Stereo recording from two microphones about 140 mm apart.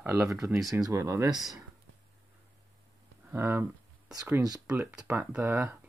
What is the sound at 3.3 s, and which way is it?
Speech, 15° right (ahead or behind).